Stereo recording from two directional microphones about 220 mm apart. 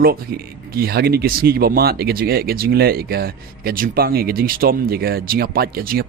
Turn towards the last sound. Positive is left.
turn(degrees=-45)  # may be behind; listen again after turning